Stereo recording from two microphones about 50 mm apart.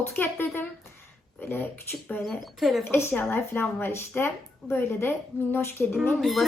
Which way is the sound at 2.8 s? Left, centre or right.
Left.